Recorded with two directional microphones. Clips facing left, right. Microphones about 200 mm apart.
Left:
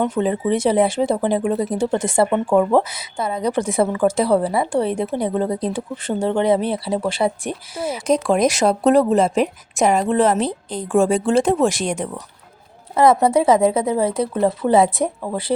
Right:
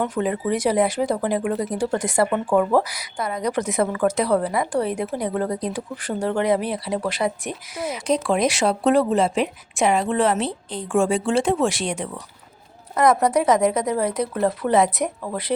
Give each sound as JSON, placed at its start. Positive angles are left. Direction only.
{"t": 0.0, "sound": "speech", "side_deg": 25}
{"t": 8.0, "sound": "a woman's voice", "side_deg": 45}
{"t": 12.9, "sound": "speech", "side_deg": 25}